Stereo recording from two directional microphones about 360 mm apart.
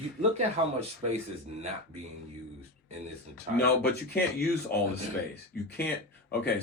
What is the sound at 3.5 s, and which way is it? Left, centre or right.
Speech, left.